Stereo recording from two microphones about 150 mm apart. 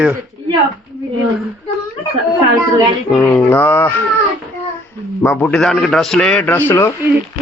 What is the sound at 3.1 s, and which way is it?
Music, 10° left (ahead or behind).